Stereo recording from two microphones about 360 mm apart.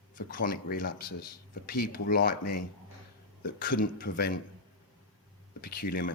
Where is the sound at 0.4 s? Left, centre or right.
Left.